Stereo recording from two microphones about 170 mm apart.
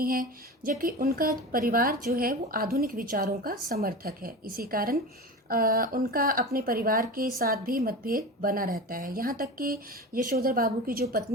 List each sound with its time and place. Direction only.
0.0 s speech: 55° right (ahead or behind)